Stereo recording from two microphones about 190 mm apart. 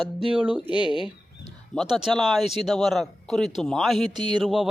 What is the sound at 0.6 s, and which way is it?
Speech, 25° left (ahead or behind).